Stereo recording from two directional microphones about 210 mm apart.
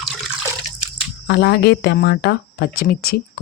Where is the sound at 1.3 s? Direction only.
50° left (ahead or behind).